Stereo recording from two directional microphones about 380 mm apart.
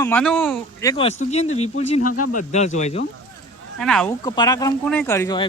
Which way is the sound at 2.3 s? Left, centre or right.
Centre.